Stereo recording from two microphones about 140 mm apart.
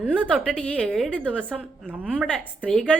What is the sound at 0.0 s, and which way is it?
Speech, 10° right (ahead or behind).